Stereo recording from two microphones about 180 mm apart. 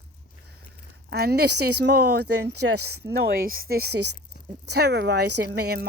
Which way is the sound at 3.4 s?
55° right (ahead or behind).